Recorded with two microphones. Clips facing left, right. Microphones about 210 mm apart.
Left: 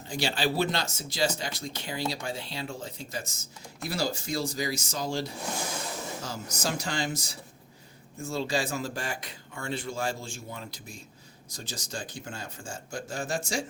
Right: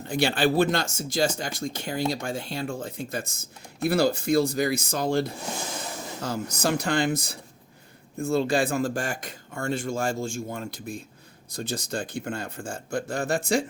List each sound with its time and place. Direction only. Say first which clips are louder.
0.1 s speech: right 6 dB; 55° right (ahead or behind)